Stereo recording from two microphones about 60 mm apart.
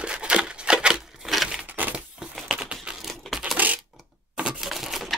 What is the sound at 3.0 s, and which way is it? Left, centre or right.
Crushing, centre.